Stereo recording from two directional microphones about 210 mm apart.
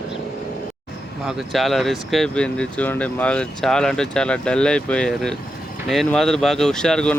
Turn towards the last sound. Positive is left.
turn(degrees=5)  # may be behind; listen again after turning